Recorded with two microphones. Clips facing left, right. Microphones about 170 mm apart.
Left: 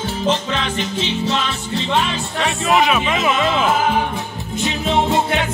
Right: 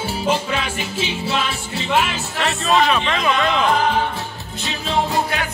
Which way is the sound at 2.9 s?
5° left (ahead or behind).